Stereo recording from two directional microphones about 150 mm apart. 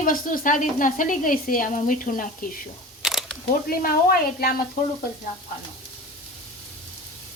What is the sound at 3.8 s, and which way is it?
Speech, 80° left.